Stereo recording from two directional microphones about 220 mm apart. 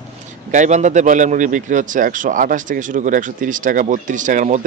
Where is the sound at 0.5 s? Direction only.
35° right (ahead or behind).